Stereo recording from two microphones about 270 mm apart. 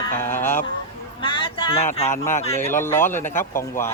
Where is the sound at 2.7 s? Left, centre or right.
Centre.